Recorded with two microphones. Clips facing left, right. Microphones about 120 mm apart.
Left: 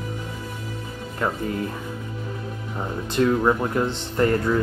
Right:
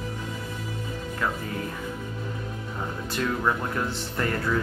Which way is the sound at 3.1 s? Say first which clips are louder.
Left 7 dB; 20° left (ahead or behind).